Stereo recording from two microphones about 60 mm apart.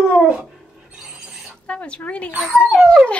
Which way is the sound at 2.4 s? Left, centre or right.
Centre.